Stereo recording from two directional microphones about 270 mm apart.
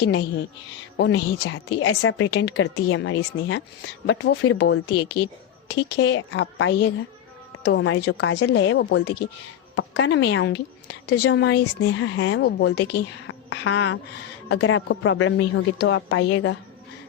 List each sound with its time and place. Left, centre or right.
0.0 s a woman's voice: left